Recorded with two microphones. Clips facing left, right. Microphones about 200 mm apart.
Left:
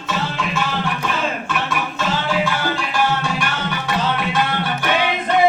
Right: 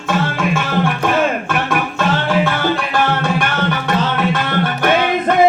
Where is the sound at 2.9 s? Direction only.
55° right (ahead or behind).